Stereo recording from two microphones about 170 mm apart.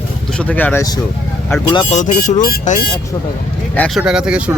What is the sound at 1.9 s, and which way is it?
Speech, 45° left (ahead or behind).